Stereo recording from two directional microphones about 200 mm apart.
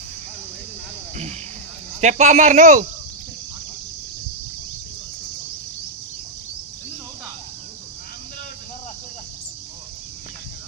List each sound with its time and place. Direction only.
2.0 s speech: 35° right (ahead or behind)